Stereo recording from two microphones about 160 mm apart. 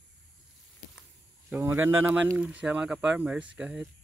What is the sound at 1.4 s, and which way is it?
Speech, 15° right (ahead or behind).